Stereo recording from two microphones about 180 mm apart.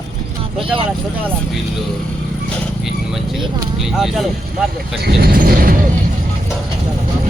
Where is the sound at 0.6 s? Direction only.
30° right (ahead or behind).